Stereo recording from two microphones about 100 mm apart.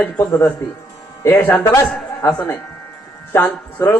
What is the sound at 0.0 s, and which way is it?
A man's voice, 20° left (ahead or behind).